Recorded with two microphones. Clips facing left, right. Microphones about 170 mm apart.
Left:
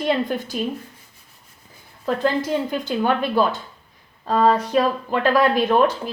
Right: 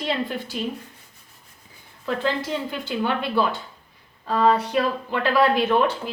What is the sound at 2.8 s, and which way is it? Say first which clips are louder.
Speech: left 4 dB; 40° left (ahead or behind).